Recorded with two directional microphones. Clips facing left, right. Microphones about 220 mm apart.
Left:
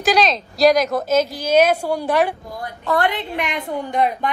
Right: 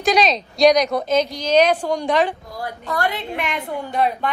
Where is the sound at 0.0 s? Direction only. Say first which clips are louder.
Even; centre (ahead or behind).